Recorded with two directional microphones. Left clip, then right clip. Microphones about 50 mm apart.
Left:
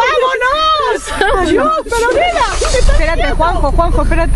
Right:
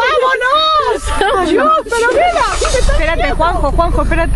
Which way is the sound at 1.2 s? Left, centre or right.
Left.